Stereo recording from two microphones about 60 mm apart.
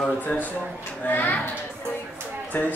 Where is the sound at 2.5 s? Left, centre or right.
Left.